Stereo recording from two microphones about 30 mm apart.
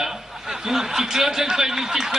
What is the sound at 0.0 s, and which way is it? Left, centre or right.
A man's voice, centre.